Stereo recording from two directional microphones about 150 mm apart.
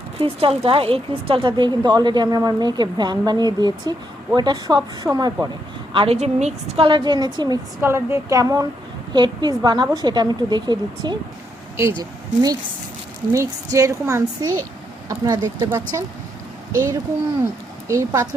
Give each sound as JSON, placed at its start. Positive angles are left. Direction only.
{"t": 0.2, "sound": "a woman's voice", "side_deg": -40}
{"t": 5.9, "sound": "a woman's voice", "side_deg": -40}
{"t": 7.8, "sound": "a woman's voice", "side_deg": -15}
{"t": 13.3, "sound": "a woman's voice", "side_deg": -20}